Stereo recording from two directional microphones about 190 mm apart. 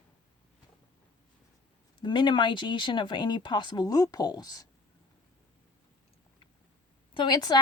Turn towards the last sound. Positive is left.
turn(degrees=20)  # may be behind; listen again after turning